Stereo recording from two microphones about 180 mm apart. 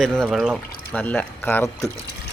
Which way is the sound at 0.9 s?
10° left (ahead or behind).